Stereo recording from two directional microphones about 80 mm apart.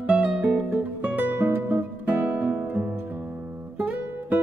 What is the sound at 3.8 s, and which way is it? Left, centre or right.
Music, centre.